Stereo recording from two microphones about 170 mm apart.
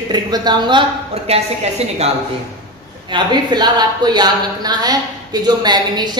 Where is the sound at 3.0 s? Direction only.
25° right (ahead or behind).